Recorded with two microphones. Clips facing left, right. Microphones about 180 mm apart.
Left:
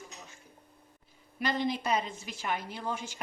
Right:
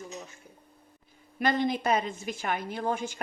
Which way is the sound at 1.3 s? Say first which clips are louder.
Right 4 dB; 55° right (ahead or behind).